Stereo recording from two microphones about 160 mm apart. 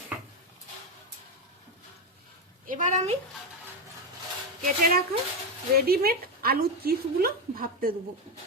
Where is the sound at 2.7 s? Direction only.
50° right (ahead or behind).